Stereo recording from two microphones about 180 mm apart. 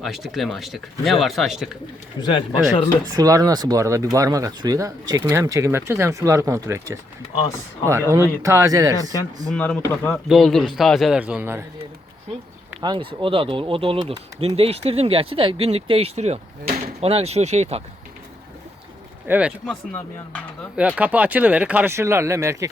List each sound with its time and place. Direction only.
0.0 s speech: centre (ahead or behind)
2.2 s speech: 25° left (ahead or behind)
3.1 s speech: 20° right (ahead or behind)
8.1 s speech: 15° right (ahead or behind)
9.5 s speech: 5° left (ahead or behind); by 11.6 s 10° right (ahead or behind)
12.8 s speech: 25° right (ahead or behind)
16.6 s door: 50° right (ahead or behind)
17.0 s speech: 35° right (ahead or behind)
19.3 s speech: 5° right (ahead or behind)
19.6 s speech: 5° left (ahead or behind)
20.7 s speech: 5° right (ahead or behind)